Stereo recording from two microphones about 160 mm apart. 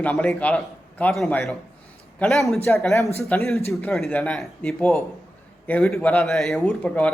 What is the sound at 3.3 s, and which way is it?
Speech, 15° left (ahead or behind).